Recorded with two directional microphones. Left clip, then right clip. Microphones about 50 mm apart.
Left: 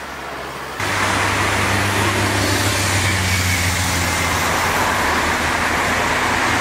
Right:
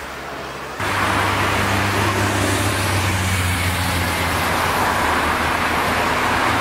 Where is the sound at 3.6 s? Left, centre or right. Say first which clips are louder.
Left 2 dB; left; by 6.5 s centre.